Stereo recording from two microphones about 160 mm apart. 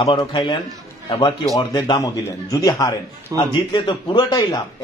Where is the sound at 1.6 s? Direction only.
25° left (ahead or behind).